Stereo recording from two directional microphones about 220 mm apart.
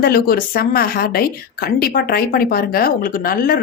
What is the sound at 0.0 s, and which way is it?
Speech, 45° left (ahead or behind).